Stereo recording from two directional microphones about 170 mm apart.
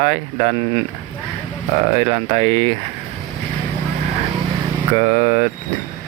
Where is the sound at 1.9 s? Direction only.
40° right (ahead or behind).